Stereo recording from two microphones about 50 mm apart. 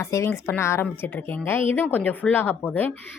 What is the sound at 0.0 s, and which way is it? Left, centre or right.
Speech, left.